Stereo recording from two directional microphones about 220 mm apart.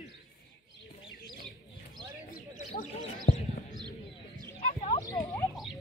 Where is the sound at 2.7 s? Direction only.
35° left (ahead or behind).